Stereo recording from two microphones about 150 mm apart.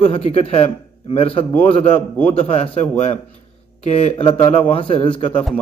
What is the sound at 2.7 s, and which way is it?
A man's voice, 40° left (ahead or behind).